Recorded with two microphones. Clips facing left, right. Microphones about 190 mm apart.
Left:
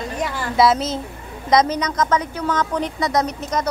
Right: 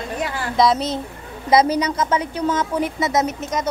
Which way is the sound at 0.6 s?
Centre (ahead or behind).